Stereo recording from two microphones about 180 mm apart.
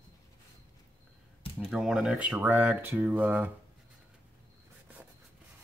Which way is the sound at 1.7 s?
5° right (ahead or behind).